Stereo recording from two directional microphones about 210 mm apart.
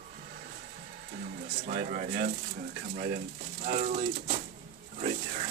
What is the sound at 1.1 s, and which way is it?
Speech, 40° right (ahead or behind).